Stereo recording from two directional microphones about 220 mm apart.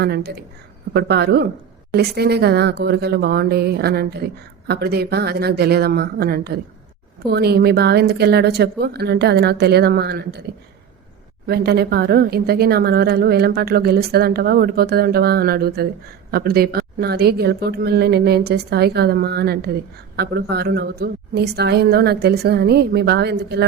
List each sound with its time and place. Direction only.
0.0 s a woman's voice: 45° right (ahead or behind)
11.4 s a woman's voice: 45° right (ahead or behind)